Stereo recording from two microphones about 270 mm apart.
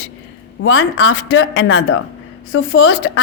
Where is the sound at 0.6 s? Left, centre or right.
Left.